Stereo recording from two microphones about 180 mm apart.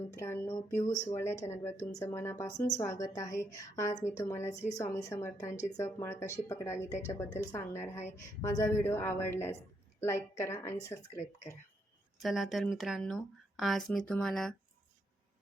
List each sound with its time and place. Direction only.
0.1 s speech: 15° left (ahead or behind)
12.2 s speech: centre (ahead or behind)